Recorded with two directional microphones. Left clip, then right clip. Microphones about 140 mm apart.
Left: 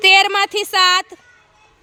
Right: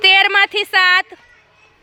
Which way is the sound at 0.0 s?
30° left (ahead or behind).